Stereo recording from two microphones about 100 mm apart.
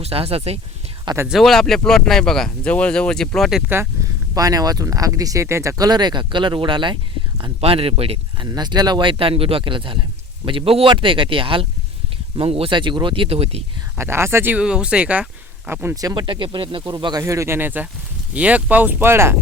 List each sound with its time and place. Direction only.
0.0 s speech: 80° right
1.3 s speech: centre (ahead or behind)
4.4 s speech: 35° right (ahead or behind); by 6.9 s 55° right (ahead or behind)
7.6 s speech: 70° right (ahead or behind)
8.4 s speech: 45° right (ahead or behind); by 12.7 s 70° right (ahead or behind)
12.7 s speech: 50° right (ahead or behind); by 13.6 s 85° right
14.0 s speech: 25° right (ahead or behind)
14.5 s speech: 10° right (ahead or behind)
16.0 s speech: 35° right (ahead or behind)
16.2 s speech: 55° right (ahead or behind)
17.2 s speech: 30° right (ahead or behind)